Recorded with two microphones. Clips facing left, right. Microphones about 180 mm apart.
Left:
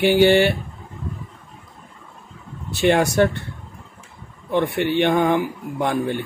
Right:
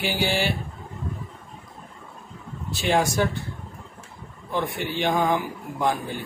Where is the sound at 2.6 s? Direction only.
65° left (ahead or behind).